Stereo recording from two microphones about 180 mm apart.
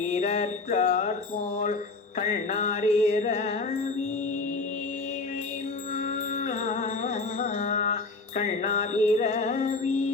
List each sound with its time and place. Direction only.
0.1 s music: 40° left (ahead or behind)
2.1 s music: 40° left (ahead or behind)
6.3 s music: 40° left (ahead or behind)